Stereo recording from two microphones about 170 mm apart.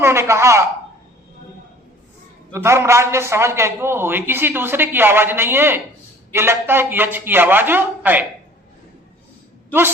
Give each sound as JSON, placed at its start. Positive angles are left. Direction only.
{"t": 0.0, "sound": "a man's voice", "side_deg": -15}
{"t": 2.5, "sound": "a man's voice", "side_deg": -15}